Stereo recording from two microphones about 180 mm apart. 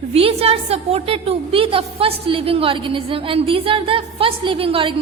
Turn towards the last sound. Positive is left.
turn(degrees=-30)  # may be behind; listen again after turning